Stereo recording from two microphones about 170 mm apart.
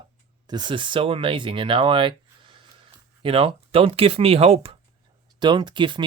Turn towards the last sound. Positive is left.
turn(degrees=-30)  # may be behind; listen again after turning